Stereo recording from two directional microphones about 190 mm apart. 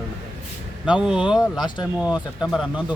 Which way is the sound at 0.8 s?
5° right (ahead or behind).